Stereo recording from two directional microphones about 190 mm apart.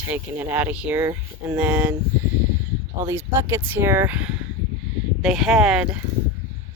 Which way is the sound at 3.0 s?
15° right (ahead or behind).